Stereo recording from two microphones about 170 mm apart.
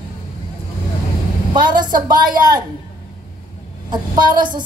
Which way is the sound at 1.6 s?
25° right (ahead or behind).